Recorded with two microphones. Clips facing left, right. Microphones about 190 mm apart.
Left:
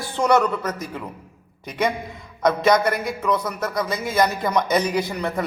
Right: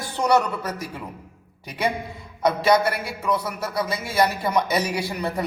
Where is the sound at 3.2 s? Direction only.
10° right (ahead or behind).